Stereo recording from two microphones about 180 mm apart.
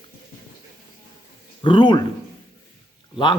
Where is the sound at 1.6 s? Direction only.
25° left (ahead or behind).